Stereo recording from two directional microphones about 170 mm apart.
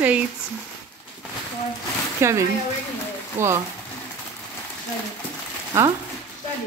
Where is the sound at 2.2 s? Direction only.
15° right (ahead or behind).